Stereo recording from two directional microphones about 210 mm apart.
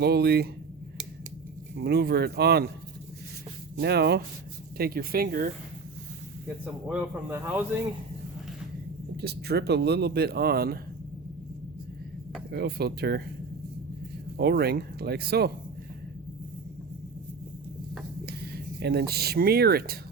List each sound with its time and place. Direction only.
0.0 s speech: 50° right (ahead or behind)
1.8 s speech: 50° right (ahead or behind)
3.8 s speech: 50° right (ahead or behind)
6.8 s speech: 10° right (ahead or behind)
9.2 s speech: 50° right (ahead or behind)
12.5 s speech: 50° right (ahead or behind)
14.3 s speech: 50° right (ahead or behind)
18.3 s speech: 50° right (ahead or behind)